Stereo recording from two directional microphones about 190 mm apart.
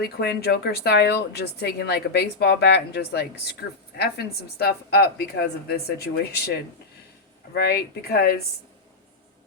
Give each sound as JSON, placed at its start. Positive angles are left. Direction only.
{"t": 0.2, "sound": "speech", "side_deg": 60}
{"t": 7.5, "sound": "speech", "side_deg": 55}